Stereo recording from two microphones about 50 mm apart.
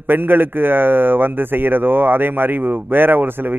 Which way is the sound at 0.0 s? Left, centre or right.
Right.